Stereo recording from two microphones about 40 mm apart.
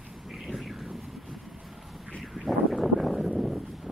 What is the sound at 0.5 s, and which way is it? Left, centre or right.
Vehicle, centre.